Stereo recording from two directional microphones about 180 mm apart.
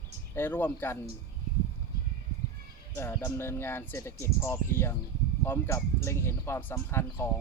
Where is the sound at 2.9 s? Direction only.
15° left (ahead or behind).